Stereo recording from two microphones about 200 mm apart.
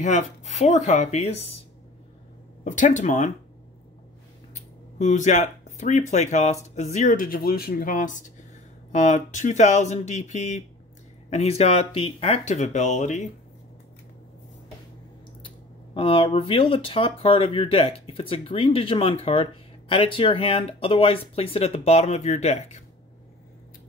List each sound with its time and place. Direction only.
0.0 s speech: 35° left (ahead or behind)
2.6 s speech: 40° left (ahead or behind)
4.9 s speech: 35° left (ahead or behind)
15.4 s speech: 25° left (ahead or behind)